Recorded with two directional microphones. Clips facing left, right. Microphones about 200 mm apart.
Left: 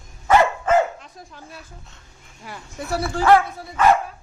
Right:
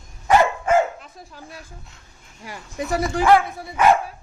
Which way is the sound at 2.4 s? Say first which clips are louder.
Right 4 dB; 15° right (ahead or behind).